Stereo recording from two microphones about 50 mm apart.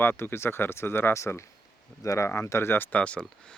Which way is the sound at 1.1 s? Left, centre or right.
Left.